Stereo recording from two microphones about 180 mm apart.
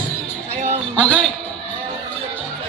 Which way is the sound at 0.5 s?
40° right (ahead or behind).